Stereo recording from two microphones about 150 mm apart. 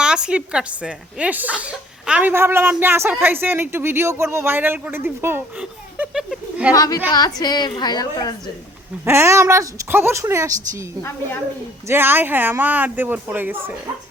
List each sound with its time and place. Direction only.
0.0 s speech: 5° right (ahead or behind)
6.7 s a woman's voice: 25° left (ahead or behind)
9.0 s speech: 15° right (ahead or behind)
11.9 s speech: 15° right (ahead or behind)